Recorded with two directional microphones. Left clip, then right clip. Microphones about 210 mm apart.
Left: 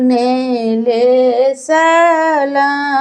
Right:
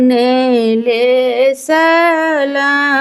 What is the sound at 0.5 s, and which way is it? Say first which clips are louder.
Female singing: right 1 dB; 20° right (ahead or behind).